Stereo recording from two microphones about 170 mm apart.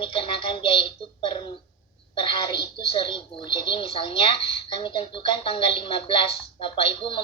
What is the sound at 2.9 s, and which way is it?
A woman's voice, 30° left (ahead or behind).